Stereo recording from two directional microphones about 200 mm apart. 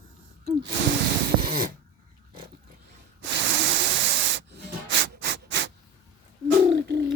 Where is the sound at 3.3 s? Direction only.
65° right (ahead or behind).